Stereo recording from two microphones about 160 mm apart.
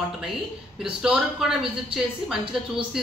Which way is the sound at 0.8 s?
5° right (ahead or behind).